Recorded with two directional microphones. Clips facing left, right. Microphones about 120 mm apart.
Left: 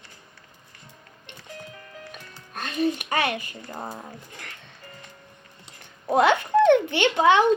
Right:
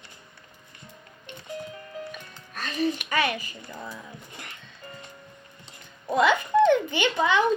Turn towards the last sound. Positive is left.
turn(degrees=70)  # may be behind; listen again after turning